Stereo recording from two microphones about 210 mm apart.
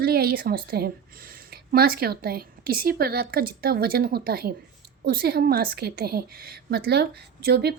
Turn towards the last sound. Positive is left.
turn(degrees=-50)  # may be behind; listen again after turning